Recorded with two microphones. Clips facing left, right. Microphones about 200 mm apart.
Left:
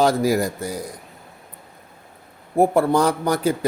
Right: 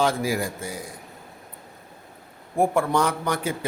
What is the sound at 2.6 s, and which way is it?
Mantra, 35° left (ahead or behind).